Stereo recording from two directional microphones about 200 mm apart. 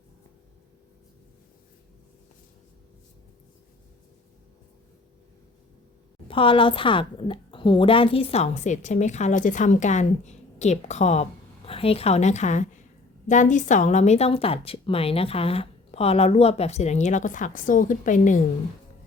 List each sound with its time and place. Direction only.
6.2 s a woman's voice: 25° left (ahead or behind)